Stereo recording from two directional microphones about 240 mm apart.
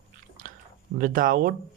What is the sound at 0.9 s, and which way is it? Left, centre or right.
Speech, right.